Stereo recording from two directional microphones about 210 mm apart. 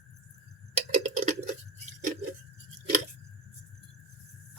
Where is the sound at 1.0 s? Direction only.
35° right (ahead or behind).